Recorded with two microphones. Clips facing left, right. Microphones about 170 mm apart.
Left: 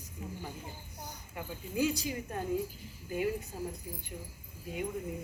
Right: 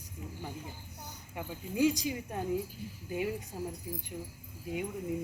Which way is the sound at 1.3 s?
15° right (ahead or behind).